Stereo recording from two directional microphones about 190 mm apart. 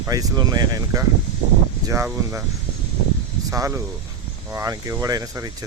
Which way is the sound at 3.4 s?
15° right (ahead or behind).